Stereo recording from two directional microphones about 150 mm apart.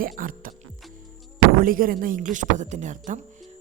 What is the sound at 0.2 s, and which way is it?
Music, 70° right (ahead or behind).